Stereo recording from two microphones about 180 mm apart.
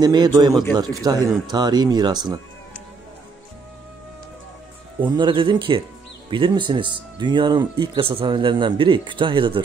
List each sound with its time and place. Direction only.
0.0 s speech: 25° right (ahead or behind)
5.0 s speech: 25° right (ahead or behind)